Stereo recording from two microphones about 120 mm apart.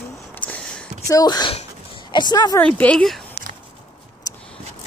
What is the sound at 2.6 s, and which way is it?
Speech, 10° left (ahead or behind).